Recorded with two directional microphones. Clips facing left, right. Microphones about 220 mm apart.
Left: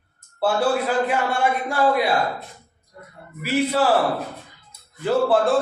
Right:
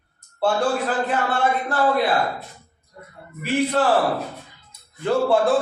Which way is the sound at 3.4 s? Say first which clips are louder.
Even; 5° left (ahead or behind).